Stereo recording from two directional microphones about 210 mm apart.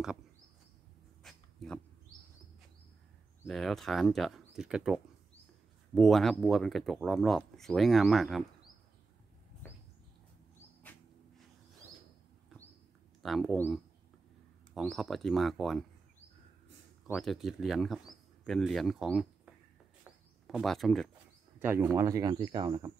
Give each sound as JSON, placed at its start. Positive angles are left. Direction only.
{"t": 1.2, "sound": "a sound", "side_deg": 0}
{"t": 3.4, "sound": "speech", "side_deg": 0}
{"t": 10.8, "sound": "a sound", "side_deg": 5}
{"t": 13.2, "sound": "speech", "side_deg": 0}
{"t": 17.1, "sound": "speech", "side_deg": 0}
{"t": 20.0, "sound": "bird", "side_deg": 0}
{"t": 21.5, "sound": "speech", "side_deg": -10}